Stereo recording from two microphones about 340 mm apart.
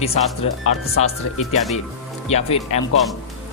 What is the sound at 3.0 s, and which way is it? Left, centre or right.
Speech, centre.